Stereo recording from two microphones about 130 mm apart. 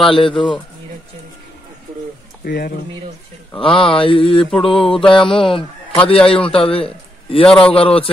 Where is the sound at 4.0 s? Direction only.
45° left (ahead or behind).